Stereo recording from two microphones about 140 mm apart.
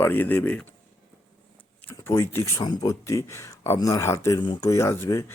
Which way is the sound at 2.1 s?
20° left (ahead or behind).